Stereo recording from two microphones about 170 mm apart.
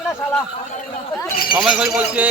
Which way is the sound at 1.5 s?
5° right (ahead or behind).